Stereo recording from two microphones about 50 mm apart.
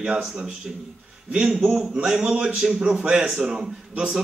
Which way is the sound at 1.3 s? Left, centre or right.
Centre.